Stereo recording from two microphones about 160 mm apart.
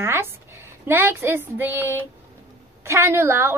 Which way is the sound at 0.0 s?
15° right (ahead or behind).